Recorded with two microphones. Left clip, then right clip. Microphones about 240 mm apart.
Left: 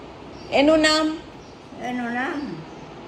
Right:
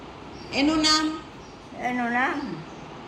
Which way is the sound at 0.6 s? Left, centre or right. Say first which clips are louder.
Left 4 dB; centre.